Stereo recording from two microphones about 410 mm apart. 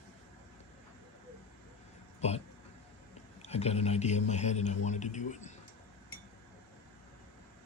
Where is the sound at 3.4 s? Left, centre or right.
Centre.